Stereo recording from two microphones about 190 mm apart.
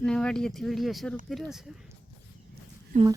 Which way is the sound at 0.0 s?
5° left (ahead or behind).